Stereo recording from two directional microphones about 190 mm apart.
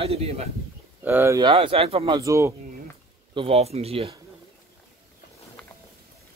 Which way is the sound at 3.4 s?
30° right (ahead or behind).